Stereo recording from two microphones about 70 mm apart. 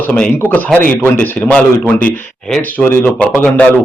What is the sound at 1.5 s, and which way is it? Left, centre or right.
Speech, centre.